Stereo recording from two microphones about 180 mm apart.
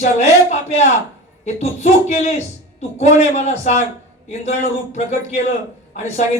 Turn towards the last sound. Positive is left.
turn(degrees=40)  # may be behind; listen again after turning